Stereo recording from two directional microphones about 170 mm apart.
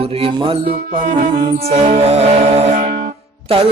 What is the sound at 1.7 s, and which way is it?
Music, 40° right (ahead or behind).